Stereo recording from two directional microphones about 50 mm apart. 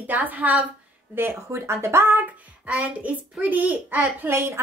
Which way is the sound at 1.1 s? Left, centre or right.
Right.